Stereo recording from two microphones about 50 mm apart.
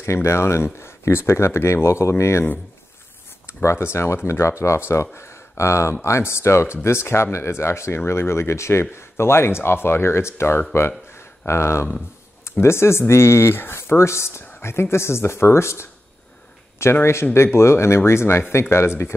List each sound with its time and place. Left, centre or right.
0.0 s speech: left
3.4 s speech: left
16.9 s speech: left